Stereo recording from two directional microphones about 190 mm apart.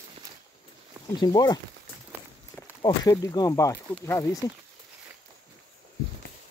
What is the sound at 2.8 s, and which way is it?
Speech, 20° left (ahead or behind).